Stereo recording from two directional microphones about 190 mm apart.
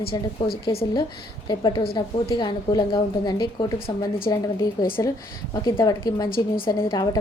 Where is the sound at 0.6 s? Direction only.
30° left (ahead or behind).